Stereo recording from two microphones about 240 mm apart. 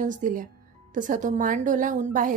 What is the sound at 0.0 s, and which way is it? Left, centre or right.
A woman's voice, right.